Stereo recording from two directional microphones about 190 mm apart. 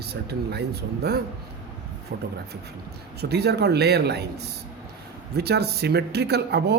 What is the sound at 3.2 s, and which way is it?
Speech, 60° right (ahead or behind).